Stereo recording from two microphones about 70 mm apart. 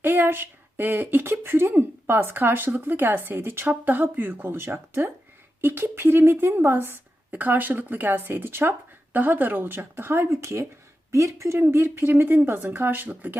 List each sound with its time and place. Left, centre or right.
0.0 s speech: right
11.6 s speech: right